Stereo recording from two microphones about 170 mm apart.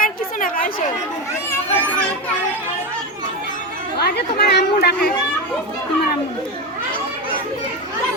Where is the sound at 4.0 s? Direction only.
70° left (ahead or behind).